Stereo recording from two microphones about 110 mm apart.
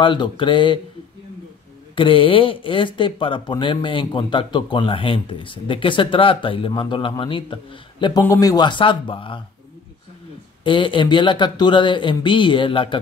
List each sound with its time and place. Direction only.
0.0 s speech: 50° left (ahead or behind)
2.0 s speech: 55° left (ahead or behind)
8.2 s speech: 30° left (ahead or behind); by 9.4 s 50° left (ahead or behind)
10.6 s speech: 50° left (ahead or behind)